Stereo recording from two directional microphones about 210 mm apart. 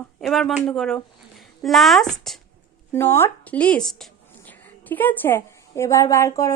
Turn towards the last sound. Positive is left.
turn(degrees=15)  # may be behind; listen again after turning